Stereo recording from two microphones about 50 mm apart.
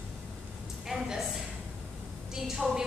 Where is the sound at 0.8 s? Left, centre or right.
Centre.